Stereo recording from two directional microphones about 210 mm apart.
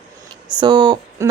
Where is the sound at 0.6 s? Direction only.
20° right (ahead or behind).